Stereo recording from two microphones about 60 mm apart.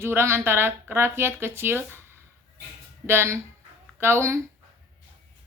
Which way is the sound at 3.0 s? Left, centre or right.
Right.